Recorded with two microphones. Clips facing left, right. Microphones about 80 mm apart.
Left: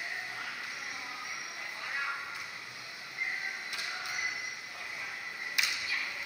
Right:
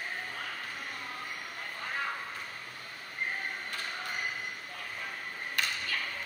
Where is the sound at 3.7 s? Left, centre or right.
Centre.